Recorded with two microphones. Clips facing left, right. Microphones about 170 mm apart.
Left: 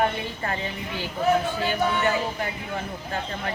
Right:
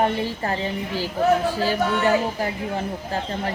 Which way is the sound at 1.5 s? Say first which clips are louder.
Right 3 dB; 35° right (ahead or behind).